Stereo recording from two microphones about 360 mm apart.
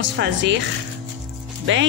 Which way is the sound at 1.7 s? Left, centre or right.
Right.